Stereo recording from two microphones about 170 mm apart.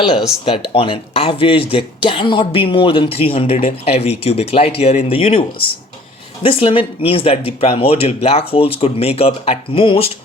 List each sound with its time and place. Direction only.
0.7 s speech: 35° left (ahead or behind)